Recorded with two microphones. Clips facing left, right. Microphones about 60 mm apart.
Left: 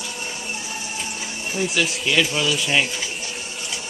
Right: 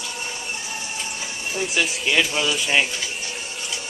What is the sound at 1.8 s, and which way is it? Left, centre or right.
Speech, centre.